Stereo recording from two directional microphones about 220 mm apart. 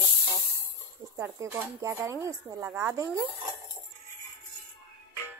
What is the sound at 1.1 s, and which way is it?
Speech, 10° right (ahead or behind).